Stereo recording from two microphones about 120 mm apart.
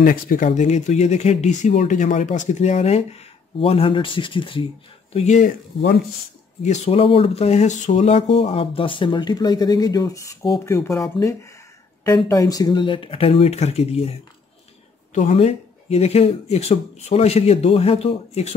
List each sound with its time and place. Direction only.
0.6 s speech: 75° left (ahead or behind); by 4.6 s 45° left (ahead or behind)
5.1 s speech: 70° left (ahead or behind)
6.6 s speech: 70° left (ahead or behind)
15.1 s speech: 70° left (ahead or behind)